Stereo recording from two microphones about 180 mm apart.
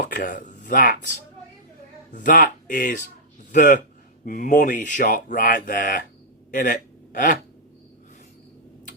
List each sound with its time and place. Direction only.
0.1 s speech: 50° left (ahead or behind)